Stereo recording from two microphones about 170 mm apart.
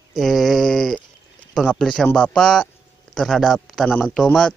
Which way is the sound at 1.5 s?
Centre (ahead or behind).